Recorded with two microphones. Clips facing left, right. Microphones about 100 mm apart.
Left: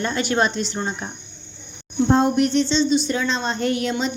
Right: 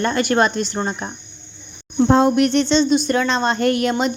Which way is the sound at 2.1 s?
85° right.